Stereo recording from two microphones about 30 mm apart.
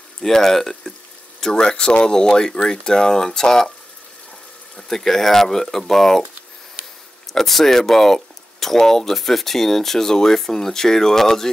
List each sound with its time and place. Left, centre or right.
0.2 s speech: centre
1.4 s speech: left
4.7 s speech: centre
7.2 s speech: centre